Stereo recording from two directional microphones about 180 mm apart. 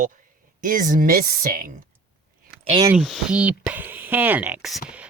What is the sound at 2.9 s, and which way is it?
Speech, 5° right (ahead or behind).